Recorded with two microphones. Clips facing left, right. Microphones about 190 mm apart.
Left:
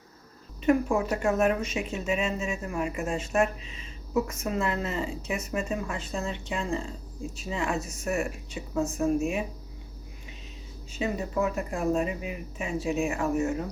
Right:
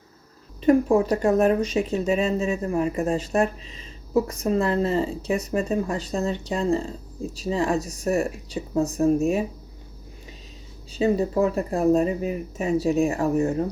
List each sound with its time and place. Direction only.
0.6 s speech: 35° right (ahead or behind)
10.9 s speech: 35° right (ahead or behind)